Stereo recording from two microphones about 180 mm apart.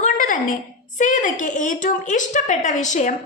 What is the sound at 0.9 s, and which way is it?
A woman's voice, 45° left (ahead or behind).